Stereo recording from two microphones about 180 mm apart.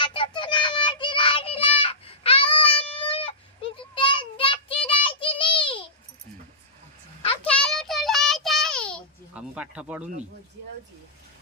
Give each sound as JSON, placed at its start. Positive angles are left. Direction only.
{"t": 0.0, "sound": "child singing", "side_deg": 30}
{"t": 7.6, "sound": "child singing", "side_deg": 0}
{"t": 9.3, "sound": "a sound", "side_deg": -5}